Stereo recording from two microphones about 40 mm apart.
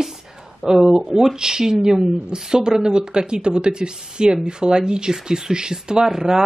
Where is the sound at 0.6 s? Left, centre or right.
Centre.